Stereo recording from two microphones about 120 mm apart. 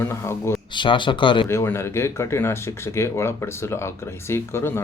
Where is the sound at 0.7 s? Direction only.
40° left (ahead or behind).